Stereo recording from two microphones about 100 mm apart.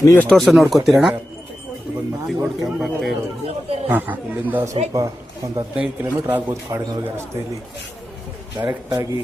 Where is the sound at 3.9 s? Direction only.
20° right (ahead or behind).